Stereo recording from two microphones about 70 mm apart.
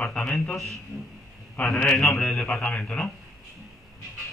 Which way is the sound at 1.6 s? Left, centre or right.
Centre.